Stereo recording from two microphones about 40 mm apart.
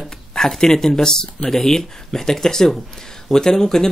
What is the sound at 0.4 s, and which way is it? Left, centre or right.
Speech, centre.